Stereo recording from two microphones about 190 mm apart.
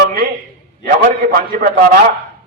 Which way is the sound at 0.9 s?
50° right (ahead or behind).